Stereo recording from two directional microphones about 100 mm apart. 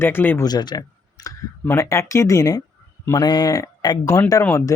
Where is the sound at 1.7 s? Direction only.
30° left (ahead or behind).